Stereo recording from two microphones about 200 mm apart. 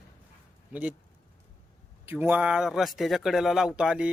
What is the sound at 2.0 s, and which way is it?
Speech, 10° right (ahead or behind).